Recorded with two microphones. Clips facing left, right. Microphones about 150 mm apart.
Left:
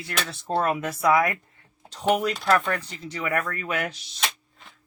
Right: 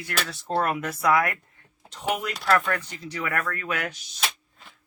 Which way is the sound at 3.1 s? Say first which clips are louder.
Left 2 dB; 20° left (ahead or behind).